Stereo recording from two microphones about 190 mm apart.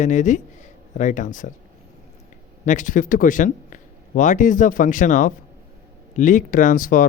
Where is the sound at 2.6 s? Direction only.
40° left (ahead or behind).